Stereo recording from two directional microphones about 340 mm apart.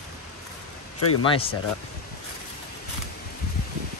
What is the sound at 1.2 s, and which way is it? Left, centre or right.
Speech, centre.